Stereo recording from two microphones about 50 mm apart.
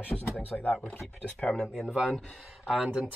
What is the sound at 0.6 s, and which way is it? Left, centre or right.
Speech, left.